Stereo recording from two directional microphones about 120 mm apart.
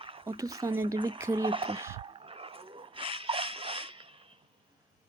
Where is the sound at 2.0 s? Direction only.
45° right (ahead or behind).